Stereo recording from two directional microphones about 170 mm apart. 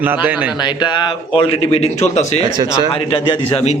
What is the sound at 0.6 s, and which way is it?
A man's voice, 25° left (ahead or behind).